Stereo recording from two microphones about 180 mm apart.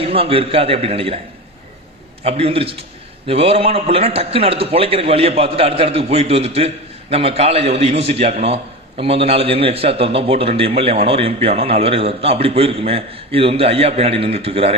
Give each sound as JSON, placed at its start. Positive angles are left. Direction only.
{"t": 0.0, "sound": "a man's voice", "side_deg": -30}
{"t": 2.2, "sound": "a man's voice", "side_deg": -35}